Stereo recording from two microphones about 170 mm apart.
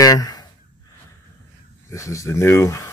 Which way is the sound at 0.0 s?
20° left (ahead or behind).